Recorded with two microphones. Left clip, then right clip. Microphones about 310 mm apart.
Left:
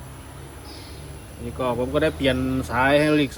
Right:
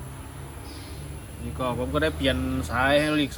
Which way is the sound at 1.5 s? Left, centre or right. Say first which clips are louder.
Left 4 dB; centre.